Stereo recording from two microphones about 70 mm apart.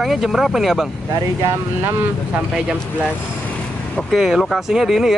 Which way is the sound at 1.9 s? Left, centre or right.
Right.